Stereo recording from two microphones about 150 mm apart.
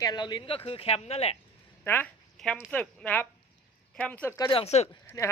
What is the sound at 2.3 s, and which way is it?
Dog, 5° left (ahead or behind).